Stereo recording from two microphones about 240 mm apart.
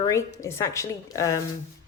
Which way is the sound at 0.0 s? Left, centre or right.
Centre.